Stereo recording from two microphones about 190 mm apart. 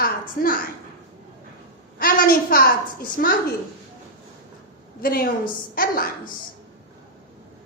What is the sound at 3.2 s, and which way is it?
Speech, 50° left (ahead or behind).